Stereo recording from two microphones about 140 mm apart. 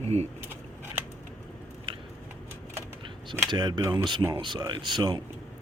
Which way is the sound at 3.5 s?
30° right (ahead or behind).